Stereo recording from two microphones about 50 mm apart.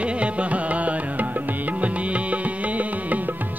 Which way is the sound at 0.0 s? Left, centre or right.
Right.